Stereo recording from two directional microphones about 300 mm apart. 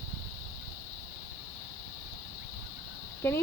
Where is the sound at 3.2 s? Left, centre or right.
Centre.